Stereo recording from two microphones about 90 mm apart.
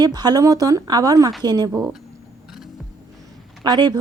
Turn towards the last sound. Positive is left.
turn(degrees=-50)  # may be behind; listen again after turning